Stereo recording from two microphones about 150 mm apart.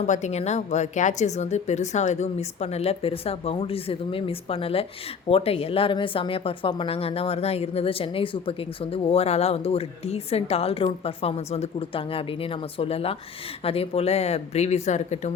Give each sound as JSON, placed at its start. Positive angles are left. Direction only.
{"t": 0.0, "sound": "a woman's voice", "side_deg": 50}